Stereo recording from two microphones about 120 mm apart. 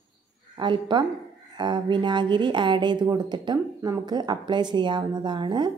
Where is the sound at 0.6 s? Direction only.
40° right (ahead or behind).